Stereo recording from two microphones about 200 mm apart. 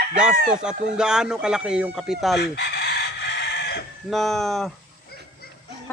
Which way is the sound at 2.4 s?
55° left (ahead or behind).